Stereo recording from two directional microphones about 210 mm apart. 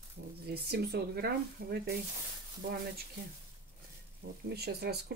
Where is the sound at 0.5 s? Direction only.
50° right (ahead or behind).